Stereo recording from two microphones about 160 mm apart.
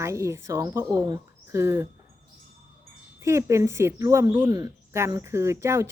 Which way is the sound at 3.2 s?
20° right (ahead or behind).